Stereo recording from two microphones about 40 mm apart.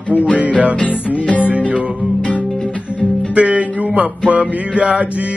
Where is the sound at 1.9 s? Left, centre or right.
Right.